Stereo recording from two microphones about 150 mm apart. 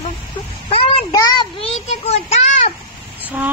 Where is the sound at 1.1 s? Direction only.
25° left (ahead or behind).